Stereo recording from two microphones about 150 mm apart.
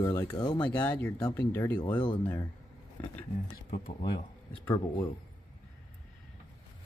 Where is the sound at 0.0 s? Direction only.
15° left (ahead or behind).